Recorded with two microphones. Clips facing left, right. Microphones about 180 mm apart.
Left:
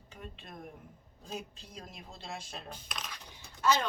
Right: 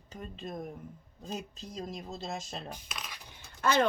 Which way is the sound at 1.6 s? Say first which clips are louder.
Right 9 dB; 40° right (ahead or behind).